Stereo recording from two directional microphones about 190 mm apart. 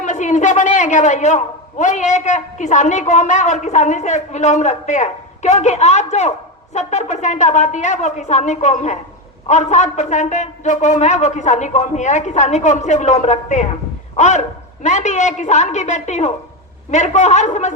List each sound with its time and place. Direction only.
0.0 s a woman's voice: 40° left (ahead or behind)